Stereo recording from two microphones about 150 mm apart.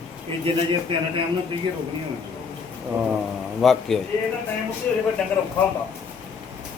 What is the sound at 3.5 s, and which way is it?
Speech, centre (ahead or behind).